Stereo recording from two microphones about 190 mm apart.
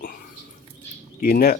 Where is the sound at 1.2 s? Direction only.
55° left (ahead or behind).